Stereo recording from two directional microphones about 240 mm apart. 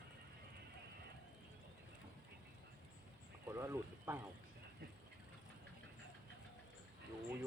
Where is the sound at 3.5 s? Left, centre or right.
Centre.